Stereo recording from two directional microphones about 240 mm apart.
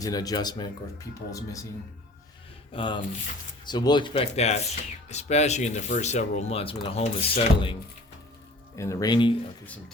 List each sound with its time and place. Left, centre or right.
0.0 s speech: centre
2.7 s speech: centre